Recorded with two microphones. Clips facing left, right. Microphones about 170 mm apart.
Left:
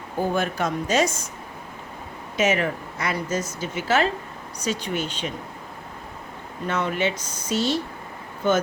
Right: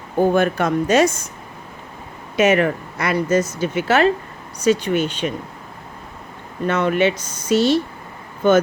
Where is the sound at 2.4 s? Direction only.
60° right (ahead or behind).